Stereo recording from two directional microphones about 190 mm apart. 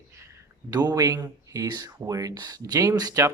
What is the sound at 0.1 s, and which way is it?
Speech, 15° right (ahead or behind).